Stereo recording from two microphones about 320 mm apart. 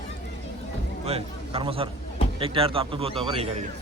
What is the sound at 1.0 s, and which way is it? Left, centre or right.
Speech, centre.